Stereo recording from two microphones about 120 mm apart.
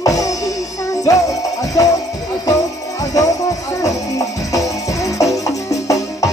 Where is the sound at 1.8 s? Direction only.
30° left (ahead or behind).